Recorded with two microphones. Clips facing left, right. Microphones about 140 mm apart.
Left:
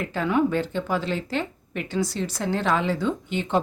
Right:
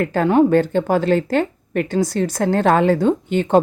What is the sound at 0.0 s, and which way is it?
Speech, 50° right (ahead or behind).